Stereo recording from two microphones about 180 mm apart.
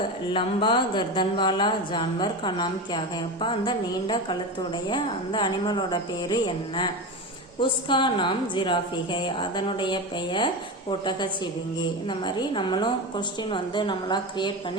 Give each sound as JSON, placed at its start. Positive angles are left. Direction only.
{"t": 0.3, "sound": "a woman's voice", "side_deg": 25}
{"t": 11.8, "sound": "a woman's voice", "side_deg": 25}